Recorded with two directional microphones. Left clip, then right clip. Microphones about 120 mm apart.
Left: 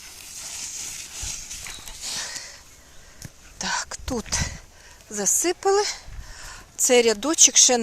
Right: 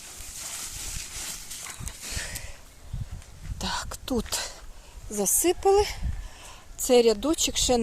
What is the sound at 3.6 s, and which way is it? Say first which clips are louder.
Whispering: left 4 dB; 25° right (ahead or behind).